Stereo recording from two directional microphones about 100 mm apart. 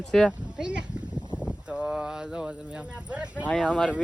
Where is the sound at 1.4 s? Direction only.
10° right (ahead or behind).